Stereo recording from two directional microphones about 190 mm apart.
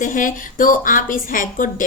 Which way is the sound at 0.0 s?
45° left (ahead or behind).